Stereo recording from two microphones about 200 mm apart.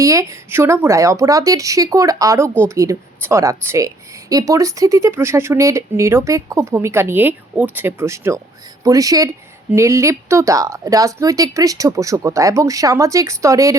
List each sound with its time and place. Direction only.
0.0 s speech: 15° right (ahead or behind)